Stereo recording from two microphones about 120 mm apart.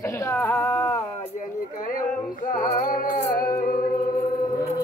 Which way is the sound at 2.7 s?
75° left (ahead or behind).